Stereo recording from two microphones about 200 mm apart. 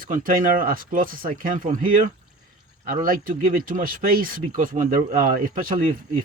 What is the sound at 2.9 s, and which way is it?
Speech, 45° right (ahead or behind).